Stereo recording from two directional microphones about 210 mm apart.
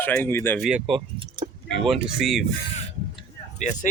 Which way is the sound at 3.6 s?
35° left (ahead or behind).